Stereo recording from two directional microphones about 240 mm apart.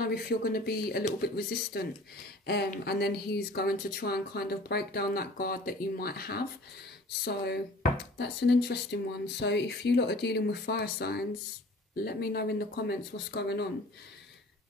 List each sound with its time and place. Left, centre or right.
0.0 s speech: left